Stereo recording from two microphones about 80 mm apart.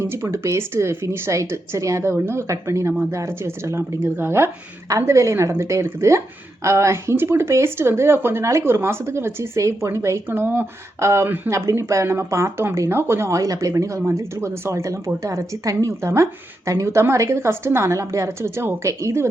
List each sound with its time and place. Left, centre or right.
0.0 s a woman's voice: right